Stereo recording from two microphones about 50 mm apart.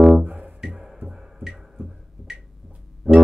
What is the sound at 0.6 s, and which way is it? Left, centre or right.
Music, centre.